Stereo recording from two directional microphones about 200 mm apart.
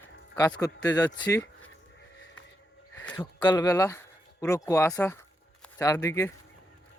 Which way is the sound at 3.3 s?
20° left (ahead or behind).